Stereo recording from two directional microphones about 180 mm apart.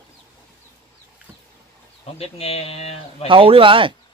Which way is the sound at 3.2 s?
30° right (ahead or behind).